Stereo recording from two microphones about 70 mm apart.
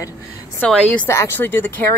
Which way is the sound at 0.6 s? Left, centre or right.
Centre.